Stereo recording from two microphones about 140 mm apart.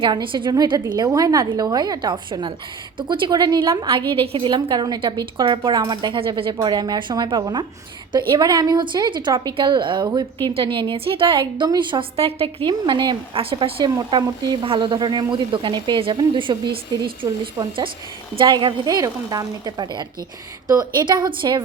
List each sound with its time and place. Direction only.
0.0 s a woman's voice: 35° right (ahead or behind)